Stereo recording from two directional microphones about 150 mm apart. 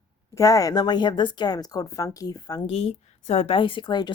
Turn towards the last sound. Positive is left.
turn(degrees=30)  # may be behind; listen again after turning